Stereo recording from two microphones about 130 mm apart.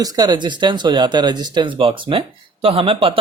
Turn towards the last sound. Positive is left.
turn(degrees=-45)  # may be behind; listen again after turning